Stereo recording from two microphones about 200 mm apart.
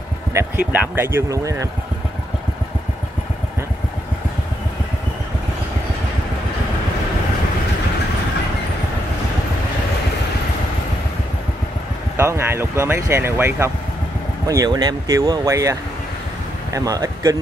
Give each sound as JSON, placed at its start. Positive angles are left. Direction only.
{"t": 0.3, "sound": "speech", "side_deg": -10}
{"t": 12.2, "sound": "speech", "side_deg": -10}